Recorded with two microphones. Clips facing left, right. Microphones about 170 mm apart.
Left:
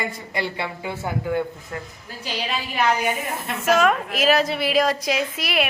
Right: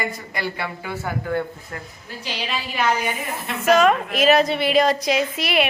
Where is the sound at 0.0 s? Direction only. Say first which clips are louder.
Even; 25° left (ahead or behind).